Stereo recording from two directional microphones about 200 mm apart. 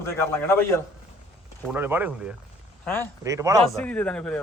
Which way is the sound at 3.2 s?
15° right (ahead or behind).